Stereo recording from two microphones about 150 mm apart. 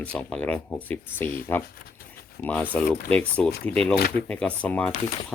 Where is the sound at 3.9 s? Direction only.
90° left.